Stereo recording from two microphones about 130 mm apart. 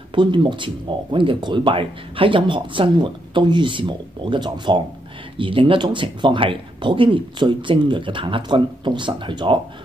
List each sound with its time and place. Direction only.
0.1 s speech: 40° right (ahead or behind)